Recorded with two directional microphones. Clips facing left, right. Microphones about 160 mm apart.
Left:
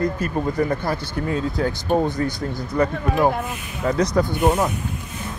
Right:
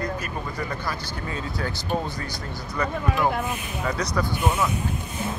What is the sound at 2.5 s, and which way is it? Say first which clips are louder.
Speech: left 3 dB; 50° left (ahead or behind).